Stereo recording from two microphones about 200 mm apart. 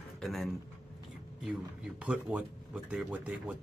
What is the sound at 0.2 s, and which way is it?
Speech, centre (ahead or behind).